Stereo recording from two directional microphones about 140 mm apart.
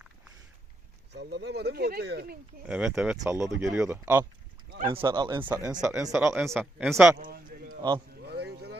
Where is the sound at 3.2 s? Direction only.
20° right (ahead or behind).